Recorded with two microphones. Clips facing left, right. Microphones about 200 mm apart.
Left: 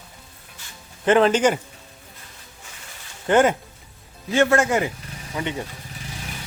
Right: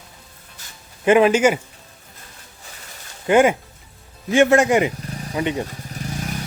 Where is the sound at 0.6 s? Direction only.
40° right (ahead or behind).